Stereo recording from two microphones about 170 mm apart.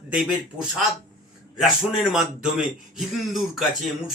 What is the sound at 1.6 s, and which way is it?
Speech, centre (ahead or behind).